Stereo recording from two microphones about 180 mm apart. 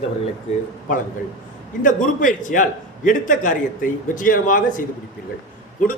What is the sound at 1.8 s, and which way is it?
A man's voice, 45° left (ahead or behind).